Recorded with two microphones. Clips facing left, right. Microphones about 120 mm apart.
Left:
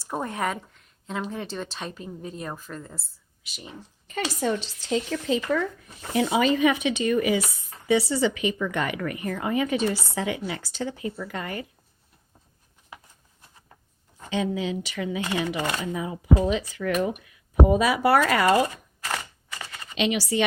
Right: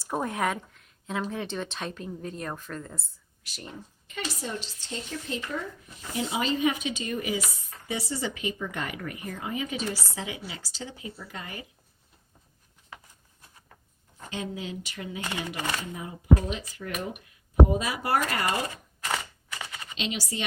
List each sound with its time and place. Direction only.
0.0 s a woman's voice: centre (ahead or behind)
4.4 s speech: 80° left
6.0 s speech: 70° left (ahead or behind)
14.3 s speech: 90° left
19.0 s computer keyboard: 5° right (ahead or behind)
20.0 s speech: 65° left (ahead or behind)